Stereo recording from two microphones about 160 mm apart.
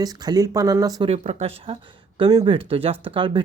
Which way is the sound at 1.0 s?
40° right (ahead or behind).